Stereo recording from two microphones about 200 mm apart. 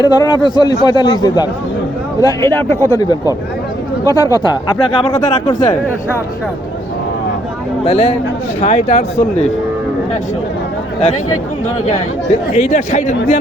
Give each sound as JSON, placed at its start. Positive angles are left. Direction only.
{"t": 0.0, "sound": "a man's voice", "side_deg": 20}
{"t": 7.9, "sound": "speech", "side_deg": 30}
{"t": 12.5, "sound": "speech", "side_deg": 35}